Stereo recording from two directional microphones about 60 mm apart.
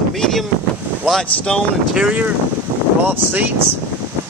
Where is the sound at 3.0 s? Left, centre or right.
Right.